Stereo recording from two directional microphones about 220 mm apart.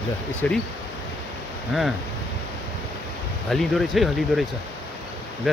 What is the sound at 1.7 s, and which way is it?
Speech, centre (ahead or behind).